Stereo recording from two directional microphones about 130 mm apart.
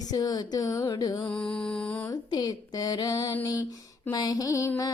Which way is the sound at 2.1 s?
30° left (ahead or behind).